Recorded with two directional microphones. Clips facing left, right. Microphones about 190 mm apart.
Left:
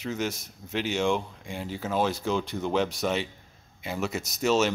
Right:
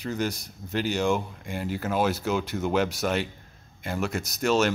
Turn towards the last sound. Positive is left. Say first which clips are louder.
# right 1 dB
turn(degrees=0)  # may be behind; listen again after turning